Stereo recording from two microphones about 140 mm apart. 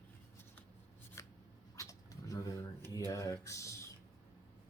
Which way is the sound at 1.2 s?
20° left (ahead or behind).